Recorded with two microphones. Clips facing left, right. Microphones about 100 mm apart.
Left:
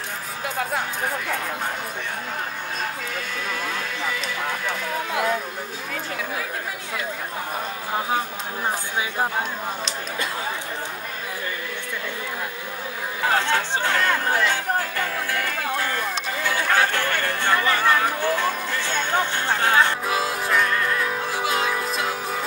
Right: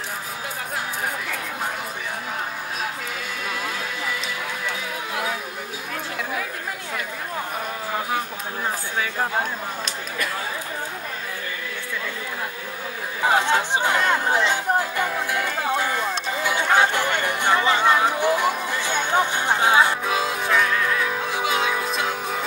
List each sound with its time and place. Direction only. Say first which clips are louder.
13.2 s chatter: right 2 dB; 15° right (ahead or behind)
20.1 s music: right 1 dB; centre (ahead or behind)